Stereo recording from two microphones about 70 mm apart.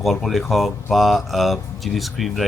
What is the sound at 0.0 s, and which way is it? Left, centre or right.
A man's voice, centre.